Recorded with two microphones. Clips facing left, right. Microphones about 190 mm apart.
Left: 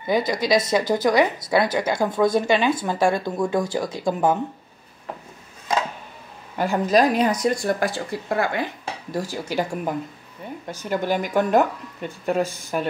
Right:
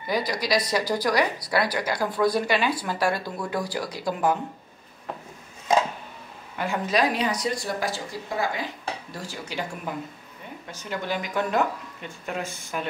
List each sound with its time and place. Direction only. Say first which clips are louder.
0.0 s speech: left 5 dB; 25° left (ahead or behind)
6.6 s speech: left 6 dB; 40° left (ahead or behind); by 8.6 s 60° left (ahead or behind)
9.1 s speech: left 8 dB; 45° left (ahead or behind)